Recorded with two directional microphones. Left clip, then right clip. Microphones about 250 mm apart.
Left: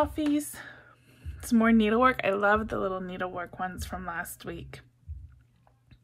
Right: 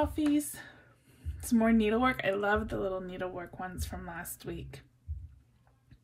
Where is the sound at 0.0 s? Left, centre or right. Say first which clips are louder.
Left 2 dB; centre.